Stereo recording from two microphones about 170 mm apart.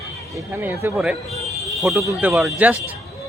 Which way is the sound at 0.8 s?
15° right (ahead or behind).